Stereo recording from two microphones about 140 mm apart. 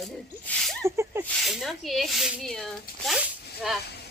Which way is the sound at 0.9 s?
20° right (ahead or behind).